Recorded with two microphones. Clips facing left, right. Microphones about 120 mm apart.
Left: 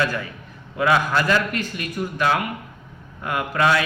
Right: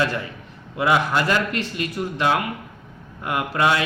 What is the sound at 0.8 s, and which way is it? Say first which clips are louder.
A man's voice: even; 20° right (ahead or behind).